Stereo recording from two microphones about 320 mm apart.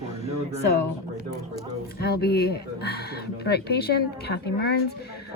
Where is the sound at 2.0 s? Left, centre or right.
Left.